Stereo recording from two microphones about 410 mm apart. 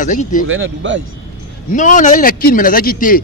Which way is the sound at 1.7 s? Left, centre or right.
Centre.